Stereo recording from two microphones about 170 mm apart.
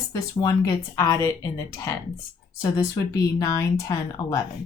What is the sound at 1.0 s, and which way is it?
Speech, 20° left (ahead or behind).